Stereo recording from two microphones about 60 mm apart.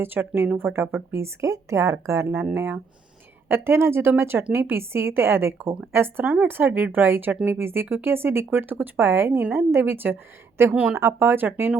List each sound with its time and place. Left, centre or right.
0.0 s speech: right
2.6 s speech: right
3.5 s speech: right